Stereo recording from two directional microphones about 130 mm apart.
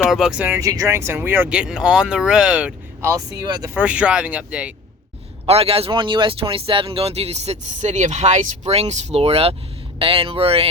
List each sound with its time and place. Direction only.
0.0 s speech: centre (ahead or behind)
0.6 s speech: 25° right (ahead or behind); by 2.7 s 10° right (ahead or behind)
3.4 s speech: 30° right (ahead or behind)
3.8 s speech: 10° right (ahead or behind)
5.5 s speech: 50° right (ahead or behind)